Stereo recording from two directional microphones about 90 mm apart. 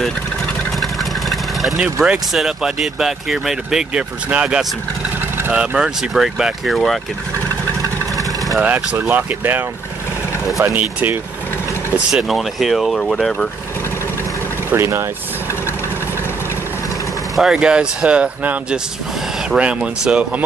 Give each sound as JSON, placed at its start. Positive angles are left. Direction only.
{"t": 0.7, "sound": "vehicle", "side_deg": 0}
{"t": 1.8, "sound": "speech", "side_deg": -5}
{"t": 8.5, "sound": "speech", "side_deg": -20}
{"t": 12.1, "sound": "speech", "side_deg": -5}
{"t": 14.7, "sound": "speech", "side_deg": -30}
{"t": 17.4, "sound": "speech", "side_deg": -5}